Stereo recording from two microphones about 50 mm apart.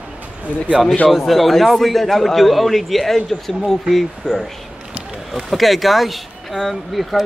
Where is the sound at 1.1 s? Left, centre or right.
Centre.